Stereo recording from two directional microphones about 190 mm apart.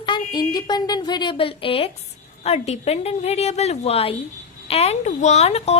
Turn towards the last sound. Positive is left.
turn(degrees=35)  # may be behind; listen again after turning